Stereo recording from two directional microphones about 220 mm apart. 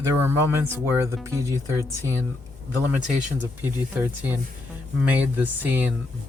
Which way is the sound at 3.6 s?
5° right (ahead or behind).